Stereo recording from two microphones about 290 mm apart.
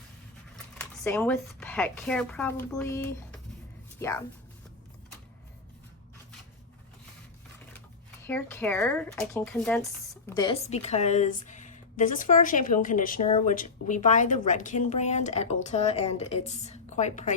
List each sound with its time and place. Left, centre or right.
0.5 s speech: centre
8.3 s speech: centre; by 17.3 s left